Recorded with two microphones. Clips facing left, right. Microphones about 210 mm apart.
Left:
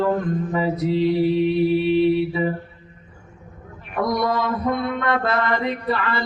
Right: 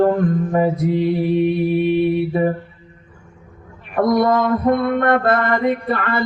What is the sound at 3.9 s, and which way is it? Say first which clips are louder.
Mantra: right 6 dB; 50° right (ahead or behind).